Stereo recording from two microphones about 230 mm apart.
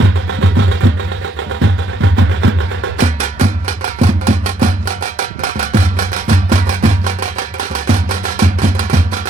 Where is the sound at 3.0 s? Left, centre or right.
Right.